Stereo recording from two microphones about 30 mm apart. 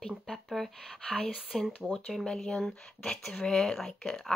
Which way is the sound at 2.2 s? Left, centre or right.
Left.